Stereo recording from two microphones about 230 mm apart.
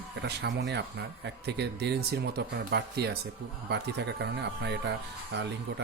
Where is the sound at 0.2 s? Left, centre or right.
Right.